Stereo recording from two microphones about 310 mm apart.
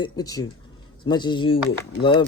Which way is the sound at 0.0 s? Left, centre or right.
Centre.